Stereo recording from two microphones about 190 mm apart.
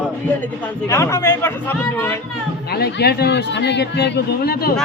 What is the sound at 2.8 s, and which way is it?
Speech, 55° left (ahead or behind).